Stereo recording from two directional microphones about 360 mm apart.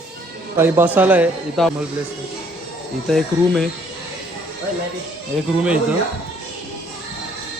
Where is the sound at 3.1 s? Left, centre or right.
Centre.